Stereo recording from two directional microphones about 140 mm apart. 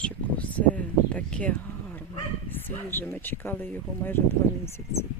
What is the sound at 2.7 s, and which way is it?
Speech, 15° left (ahead or behind).